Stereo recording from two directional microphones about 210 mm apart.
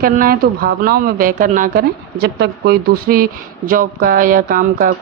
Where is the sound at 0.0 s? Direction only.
45° right (ahead or behind).